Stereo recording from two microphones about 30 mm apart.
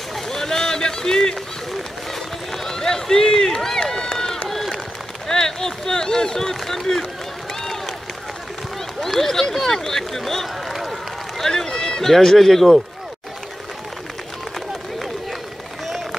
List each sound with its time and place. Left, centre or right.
0.3 s a sound: centre
2.5 s run: centre
4.5 s run: centre
5.3 s a sound: left
6.7 s speech: centre
9.0 s speech: centre
10.7 s run: centre
11.3 s run: centre
12.0 s speech: centre